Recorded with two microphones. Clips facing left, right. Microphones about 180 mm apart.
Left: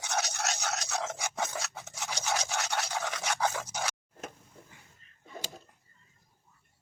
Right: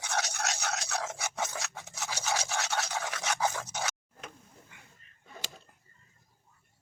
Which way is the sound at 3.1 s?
5° right (ahead or behind).